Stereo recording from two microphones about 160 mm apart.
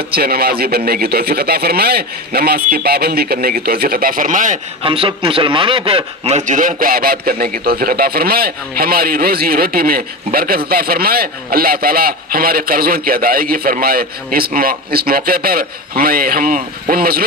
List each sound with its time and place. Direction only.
0.1 s a man's voice: 75° right (ahead or behind); by 4.6 s 55° right (ahead or behind)
4.8 s a man's voice: 35° right (ahead or behind); by 17.2 s 70° right (ahead or behind)